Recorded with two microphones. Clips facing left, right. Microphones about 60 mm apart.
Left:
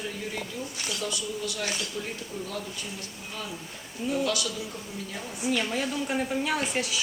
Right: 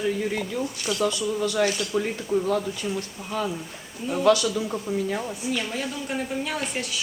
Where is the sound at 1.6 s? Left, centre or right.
Right.